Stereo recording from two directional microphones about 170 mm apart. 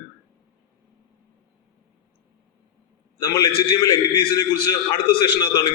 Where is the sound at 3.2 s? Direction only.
20° left (ahead or behind).